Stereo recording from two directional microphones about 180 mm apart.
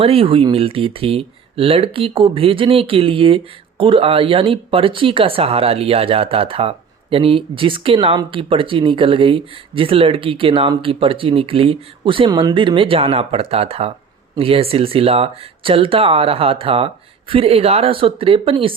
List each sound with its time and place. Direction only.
0.0 s speech: 30° right (ahead or behind)